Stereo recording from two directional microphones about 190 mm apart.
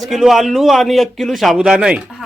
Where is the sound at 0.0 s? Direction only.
Centre (ahead or behind).